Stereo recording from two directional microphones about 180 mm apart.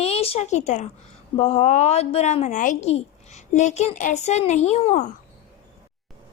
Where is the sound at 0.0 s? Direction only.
35° left (ahead or behind).